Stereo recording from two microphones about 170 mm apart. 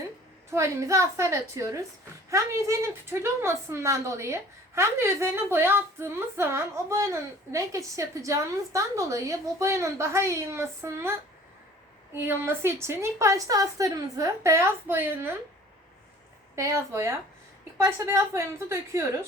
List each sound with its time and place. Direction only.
0.5 s a woman's voice: 15° right (ahead or behind)
16.6 s a woman's voice: 15° right (ahead or behind)